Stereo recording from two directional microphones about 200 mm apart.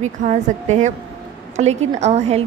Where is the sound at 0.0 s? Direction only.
35° right (ahead or behind).